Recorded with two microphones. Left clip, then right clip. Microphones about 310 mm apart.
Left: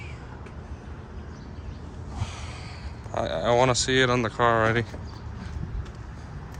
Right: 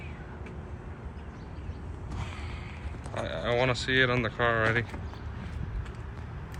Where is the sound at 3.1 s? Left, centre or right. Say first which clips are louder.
Left 7 dB; centre.